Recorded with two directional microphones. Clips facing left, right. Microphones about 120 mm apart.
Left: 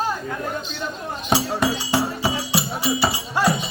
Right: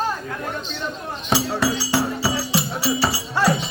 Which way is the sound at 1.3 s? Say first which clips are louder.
Even; 20° left (ahead or behind).